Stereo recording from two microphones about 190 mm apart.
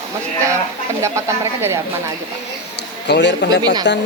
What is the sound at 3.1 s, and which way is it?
Speech, 65° left (ahead or behind).